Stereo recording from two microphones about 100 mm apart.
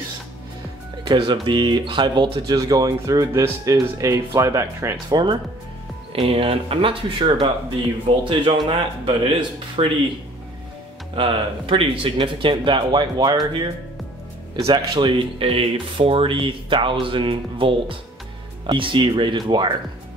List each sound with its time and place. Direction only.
1.0 s speech: 55° right (ahead or behind)
2.5 s speech: 40° right (ahead or behind)
5.1 s speech: 50° right (ahead or behind)
6.2 s speech: 70° right (ahead or behind)
8.6 s speech: 60° right (ahead or behind)
11.1 s speech: 60° right (ahead or behind)
14.7 s speech: 55° right (ahead or behind)